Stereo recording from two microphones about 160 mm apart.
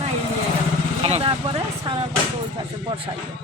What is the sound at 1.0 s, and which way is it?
Speech, 35° right (ahead or behind).